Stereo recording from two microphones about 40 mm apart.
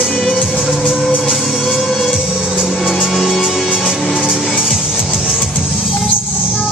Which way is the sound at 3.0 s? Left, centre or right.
Centre.